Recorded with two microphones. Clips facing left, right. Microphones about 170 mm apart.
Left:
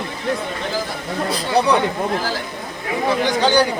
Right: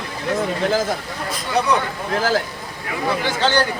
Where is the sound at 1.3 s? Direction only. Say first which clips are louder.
Left 2 dB; 35° left (ahead or behind).